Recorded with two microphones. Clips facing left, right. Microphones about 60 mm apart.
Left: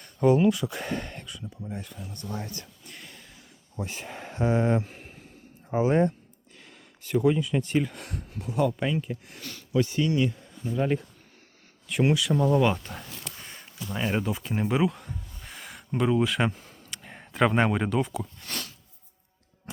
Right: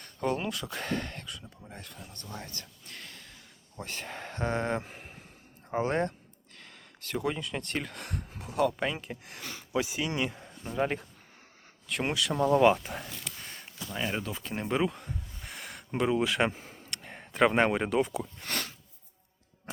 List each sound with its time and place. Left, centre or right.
0.0 s speech: centre
2.3 s speech: centre
9.4 s speech: centre
10.1 s speech: right
10.8 s speech: centre
11.9 s speech: centre
13.4 s a sound: centre
16.0 s speech: centre
16.5 s speech: right
16.9 s speech: centre
18.4 s plop: right